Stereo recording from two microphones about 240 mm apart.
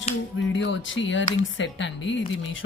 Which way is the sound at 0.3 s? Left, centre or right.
Left.